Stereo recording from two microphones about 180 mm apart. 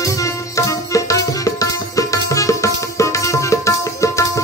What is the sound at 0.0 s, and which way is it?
Music, 15° left (ahead or behind).